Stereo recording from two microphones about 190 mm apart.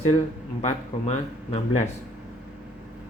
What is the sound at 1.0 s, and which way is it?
Speech, 35° left (ahead or behind).